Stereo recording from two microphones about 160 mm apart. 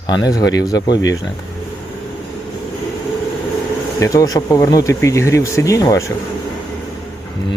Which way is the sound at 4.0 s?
20° left (ahead or behind).